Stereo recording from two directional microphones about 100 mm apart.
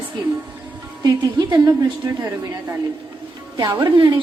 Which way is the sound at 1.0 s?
40° right (ahead or behind).